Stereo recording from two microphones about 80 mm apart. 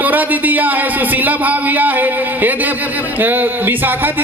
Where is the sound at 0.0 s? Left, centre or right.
Right.